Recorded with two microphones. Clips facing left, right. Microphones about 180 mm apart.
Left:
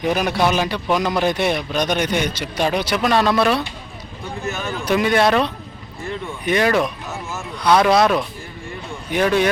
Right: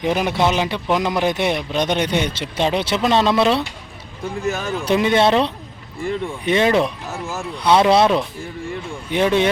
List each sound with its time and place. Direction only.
0.0 s speech: 20° right (ahead or behind)